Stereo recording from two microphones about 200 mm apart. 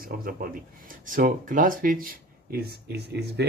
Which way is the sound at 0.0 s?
45° right (ahead or behind).